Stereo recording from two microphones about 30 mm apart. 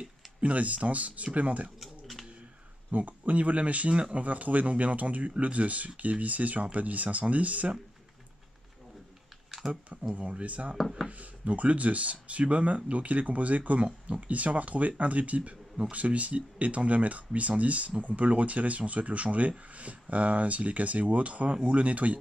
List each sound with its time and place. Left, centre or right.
0.4 s speech: right
1.8 s pigeon: centre
2.9 s speech: right
9.6 s speech: centre
10.0 s speech: right